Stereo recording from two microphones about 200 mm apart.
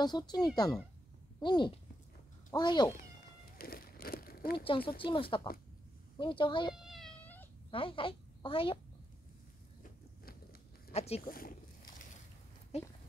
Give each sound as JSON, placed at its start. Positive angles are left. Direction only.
{"t": 0.0, "sound": "speech", "side_deg": 20}
{"t": 3.5, "sound": "crumpling", "side_deg": 45}
{"t": 4.6, "sound": "speech", "side_deg": 25}
{"t": 6.7, "sound": "cat", "side_deg": 0}
{"t": 7.7, "sound": "a woman's voice", "side_deg": 25}
{"t": 10.9, "sound": "speech", "side_deg": 30}
{"t": 11.2, "sound": "speech", "side_deg": 45}
{"t": 12.7, "sound": "speech", "side_deg": 30}